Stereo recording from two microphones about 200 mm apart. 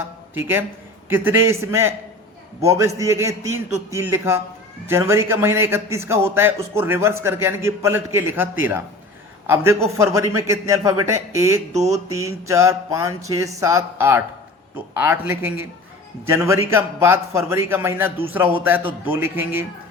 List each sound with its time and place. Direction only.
0.3 s a man's voice: 10° right (ahead or behind)
10.0 s a man's voice: 15° right (ahead or behind)
11.7 s a sound: 35° right (ahead or behind)
12.1 s a man's voice: 15° right (ahead or behind)